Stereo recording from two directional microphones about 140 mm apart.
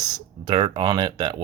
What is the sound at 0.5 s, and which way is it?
Speech, 40° right (ahead or behind).